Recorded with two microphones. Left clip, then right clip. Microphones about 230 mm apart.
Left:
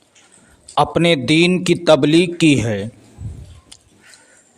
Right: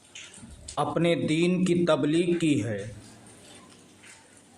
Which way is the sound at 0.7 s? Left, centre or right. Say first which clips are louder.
Left 11 dB; left.